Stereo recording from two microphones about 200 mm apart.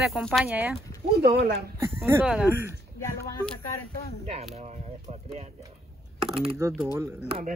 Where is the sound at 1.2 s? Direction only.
55° right (ahead or behind).